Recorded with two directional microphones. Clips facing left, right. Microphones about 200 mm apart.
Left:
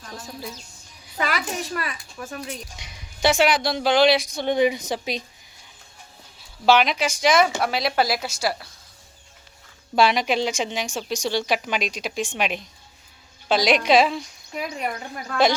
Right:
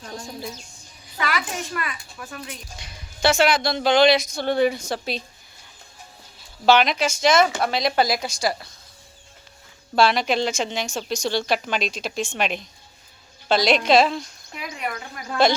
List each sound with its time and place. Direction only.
1.2 s a sound: 40° left (ahead or behind)
1.7 s a child's voice: 35° left (ahead or behind)
3.2 s speech: 15° left (ahead or behind)
6.7 s a woman's voice: 10° left (ahead or behind)
9.9 s speech: 15° left (ahead or behind)
14.5 s a child's voice: 40° left (ahead or behind)